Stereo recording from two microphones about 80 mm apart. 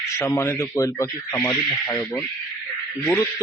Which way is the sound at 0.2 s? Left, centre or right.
Left.